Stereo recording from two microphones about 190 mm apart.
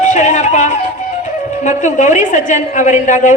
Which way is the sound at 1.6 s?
40° left (ahead or behind).